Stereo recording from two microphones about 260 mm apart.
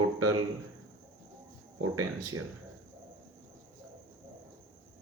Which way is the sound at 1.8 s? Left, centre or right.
Right.